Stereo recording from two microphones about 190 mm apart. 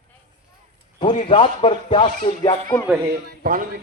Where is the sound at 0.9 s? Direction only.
30° left (ahead or behind).